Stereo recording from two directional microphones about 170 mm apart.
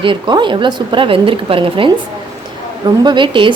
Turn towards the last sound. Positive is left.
turn(degrees=-30)  # may be behind; listen again after turning